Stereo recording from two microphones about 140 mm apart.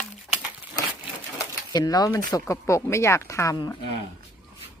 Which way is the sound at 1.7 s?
25° left (ahead or behind).